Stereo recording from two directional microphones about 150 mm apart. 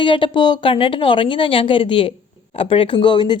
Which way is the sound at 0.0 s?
35° left (ahead or behind).